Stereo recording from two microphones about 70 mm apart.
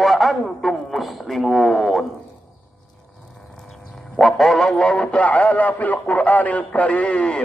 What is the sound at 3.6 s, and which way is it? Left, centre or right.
A man's voice, centre.